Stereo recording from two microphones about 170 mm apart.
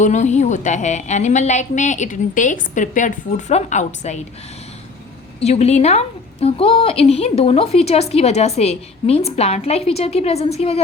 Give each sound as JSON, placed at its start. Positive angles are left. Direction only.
{"t": 0.0, "sound": "a woman's voice", "side_deg": 45}
{"t": 5.4, "sound": "a woman's voice", "side_deg": 40}